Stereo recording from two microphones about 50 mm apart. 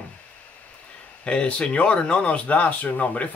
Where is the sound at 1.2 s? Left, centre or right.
Left.